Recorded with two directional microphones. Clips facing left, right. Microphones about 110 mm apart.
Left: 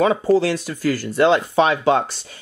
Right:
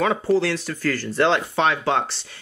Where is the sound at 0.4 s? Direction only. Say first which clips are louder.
Left 3 dB; 15° left (ahead or behind).